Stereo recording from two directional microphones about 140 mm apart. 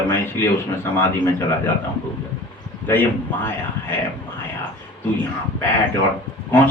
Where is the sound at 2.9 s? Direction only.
15° left (ahead or behind).